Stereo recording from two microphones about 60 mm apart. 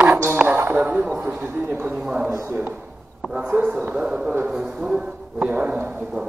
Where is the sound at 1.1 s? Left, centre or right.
Right.